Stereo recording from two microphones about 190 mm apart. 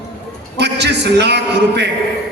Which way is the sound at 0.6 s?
60° right (ahead or behind).